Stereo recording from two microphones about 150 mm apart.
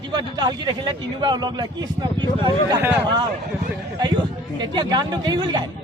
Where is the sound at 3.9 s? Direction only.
30° right (ahead or behind).